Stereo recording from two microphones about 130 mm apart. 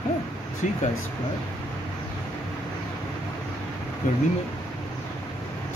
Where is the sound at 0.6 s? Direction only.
70° left (ahead or behind).